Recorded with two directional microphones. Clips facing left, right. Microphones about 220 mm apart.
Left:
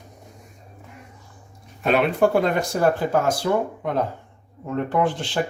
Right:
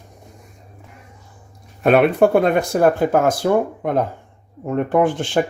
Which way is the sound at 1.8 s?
55° right (ahead or behind).